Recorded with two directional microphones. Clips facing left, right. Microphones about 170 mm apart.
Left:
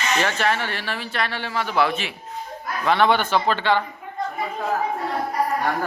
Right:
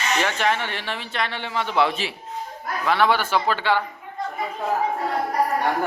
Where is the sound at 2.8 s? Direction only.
5° right (ahead or behind).